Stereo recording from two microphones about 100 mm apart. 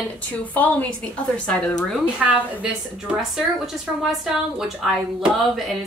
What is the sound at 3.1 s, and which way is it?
A woman's voice, 5° right (ahead or behind).